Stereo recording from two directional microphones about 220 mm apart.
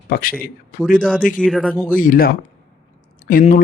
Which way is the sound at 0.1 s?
40° left (ahead or behind).